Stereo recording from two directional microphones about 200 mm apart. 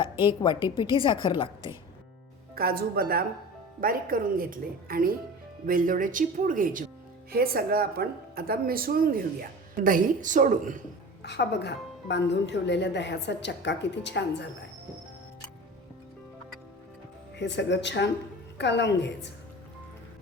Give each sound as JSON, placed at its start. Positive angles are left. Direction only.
{"t": 0.0, "sound": "a woman's voice", "side_deg": 25}
{"t": 2.6, "sound": "speech", "side_deg": -50}
{"t": 11.2, "sound": "speech", "side_deg": 55}
{"t": 17.3, "sound": "speech", "side_deg": 60}